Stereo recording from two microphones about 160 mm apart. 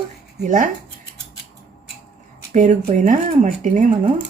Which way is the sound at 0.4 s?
55° right (ahead or behind).